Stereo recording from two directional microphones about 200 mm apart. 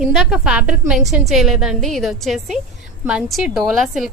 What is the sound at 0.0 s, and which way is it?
A woman's voice, 5° right (ahead or behind).